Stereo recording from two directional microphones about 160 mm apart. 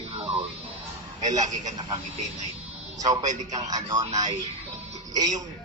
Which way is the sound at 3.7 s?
25° right (ahead or behind).